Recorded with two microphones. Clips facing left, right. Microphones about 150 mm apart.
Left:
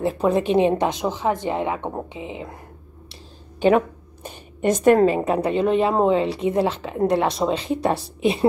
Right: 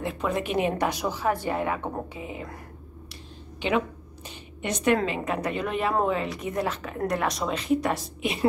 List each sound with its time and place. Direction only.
0.0 s speech: 35° left (ahead or behind)
3.6 s speech: 50° left (ahead or behind); by 8.5 s 30° left (ahead or behind)